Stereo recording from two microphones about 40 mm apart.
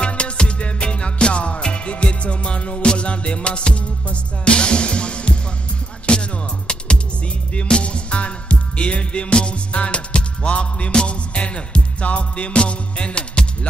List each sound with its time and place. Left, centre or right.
0.0 s music: left
7.5 s music: left